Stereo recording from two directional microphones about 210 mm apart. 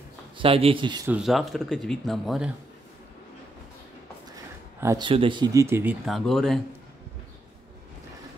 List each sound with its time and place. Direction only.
0.4 s a man's voice: 25° right (ahead or behind)
1.0 s speech: 5° right (ahead or behind)
4.7 s speech: 15° right (ahead or behind)
6.0 s speech: centre (ahead or behind)